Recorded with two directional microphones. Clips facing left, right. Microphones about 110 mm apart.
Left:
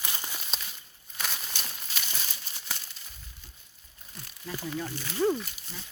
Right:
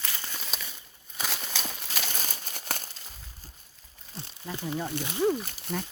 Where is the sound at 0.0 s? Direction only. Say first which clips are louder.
Left 1 dB; 15° left (ahead or behind).